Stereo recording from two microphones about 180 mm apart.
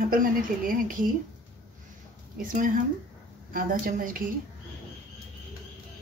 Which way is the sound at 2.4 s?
50° right (ahead or behind).